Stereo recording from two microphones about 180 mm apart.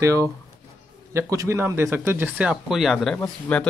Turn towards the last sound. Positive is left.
turn(degrees=10)  # may be behind; listen again after turning